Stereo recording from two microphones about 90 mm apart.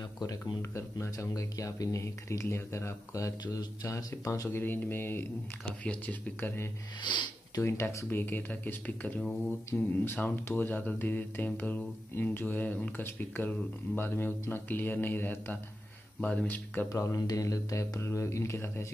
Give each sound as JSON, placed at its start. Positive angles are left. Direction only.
{"t": 0.2, "sound": "speech", "side_deg": 50}
{"t": 0.6, "sound": "speech", "side_deg": 30}
{"t": 4.5, "sound": "speech", "side_deg": 25}
{"t": 7.0, "sound": "speech", "side_deg": 55}
{"t": 7.5, "sound": "speech", "side_deg": 30}
{"t": 16.9, "sound": "speech", "side_deg": 35}